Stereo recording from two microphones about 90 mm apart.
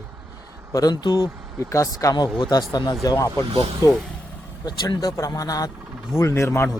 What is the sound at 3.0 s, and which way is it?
Speech, 35° left (ahead or behind).